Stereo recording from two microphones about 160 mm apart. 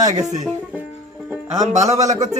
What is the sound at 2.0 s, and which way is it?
Speech, 20° right (ahead or behind).